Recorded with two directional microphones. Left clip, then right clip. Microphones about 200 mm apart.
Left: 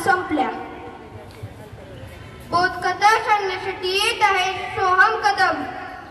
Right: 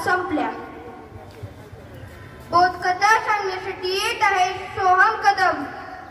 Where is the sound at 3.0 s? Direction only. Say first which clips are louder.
Left 2 dB; 30° right (ahead or behind).